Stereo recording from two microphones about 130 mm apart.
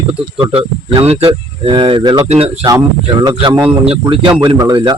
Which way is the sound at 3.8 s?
50° right (ahead or behind).